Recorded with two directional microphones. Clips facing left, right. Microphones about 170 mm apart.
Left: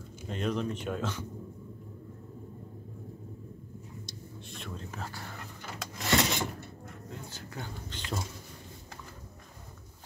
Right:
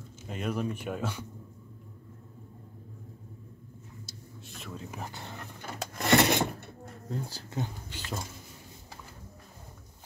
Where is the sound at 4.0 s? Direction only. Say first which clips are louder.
Left 3 dB; 5° right (ahead or behind).